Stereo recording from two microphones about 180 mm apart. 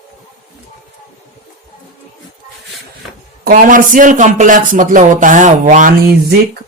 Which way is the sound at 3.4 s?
45° right (ahead or behind).